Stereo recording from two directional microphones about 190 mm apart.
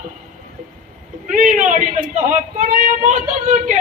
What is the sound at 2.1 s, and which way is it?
A man's voice, 40° right (ahead or behind).